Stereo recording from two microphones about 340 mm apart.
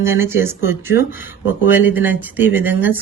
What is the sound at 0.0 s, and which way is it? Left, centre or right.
Speech, centre.